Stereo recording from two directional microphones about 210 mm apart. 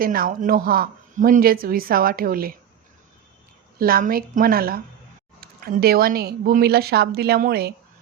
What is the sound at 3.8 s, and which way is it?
Speech, 45° right (ahead or behind).